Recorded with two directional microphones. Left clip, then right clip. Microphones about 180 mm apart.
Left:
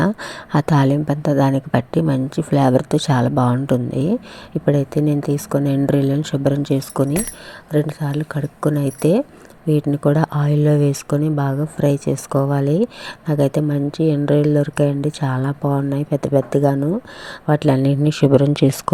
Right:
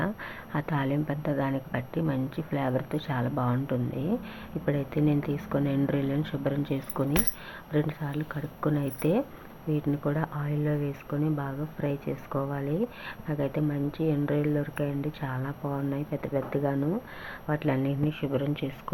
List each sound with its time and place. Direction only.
0.0 s speech: 55° left (ahead or behind); by 18.8 s 75° left (ahead or behind)